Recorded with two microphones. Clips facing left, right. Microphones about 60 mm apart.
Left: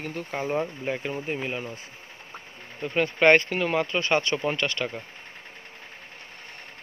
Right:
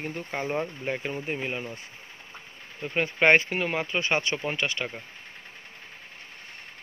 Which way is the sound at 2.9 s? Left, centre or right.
Centre.